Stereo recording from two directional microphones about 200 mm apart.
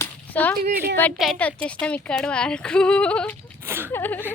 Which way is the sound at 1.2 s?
5° left (ahead or behind).